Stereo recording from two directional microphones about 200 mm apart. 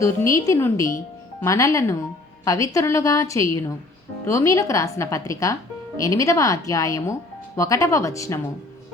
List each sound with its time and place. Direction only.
0.0 s speech: 15° left (ahead or behind)